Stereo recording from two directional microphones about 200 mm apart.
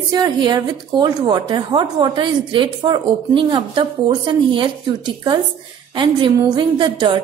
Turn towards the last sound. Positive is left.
turn(degrees=-25)  # may be behind; listen again after turning